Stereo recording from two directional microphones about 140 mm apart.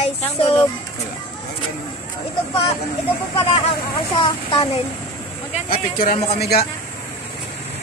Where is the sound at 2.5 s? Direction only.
40° left (ahead or behind).